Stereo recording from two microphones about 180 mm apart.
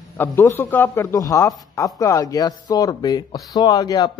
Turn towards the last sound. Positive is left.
turn(degrees=20)  # may be behind; listen again after turning